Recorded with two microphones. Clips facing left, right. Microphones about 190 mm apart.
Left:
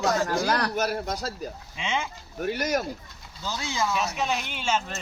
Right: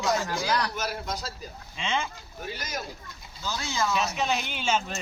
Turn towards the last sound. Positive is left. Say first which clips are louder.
# even
turn(degrees=0)  # may be behind; listen again after turning